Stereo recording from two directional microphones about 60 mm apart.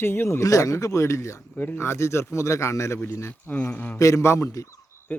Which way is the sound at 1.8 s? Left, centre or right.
Left.